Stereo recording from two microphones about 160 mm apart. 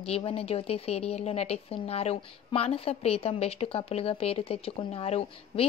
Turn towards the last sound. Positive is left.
turn(degrees=40)  # may be behind; listen again after turning